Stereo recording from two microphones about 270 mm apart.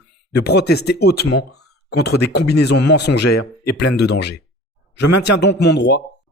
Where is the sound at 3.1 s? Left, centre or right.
Left.